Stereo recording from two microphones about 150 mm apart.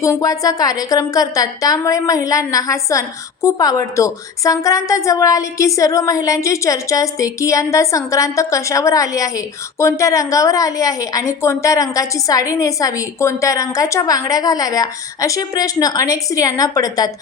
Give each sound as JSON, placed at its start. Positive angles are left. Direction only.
{"t": 0.0, "sound": "a woman's voice", "side_deg": 20}